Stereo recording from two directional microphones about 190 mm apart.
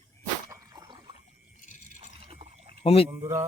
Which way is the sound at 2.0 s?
30° right (ahead or behind).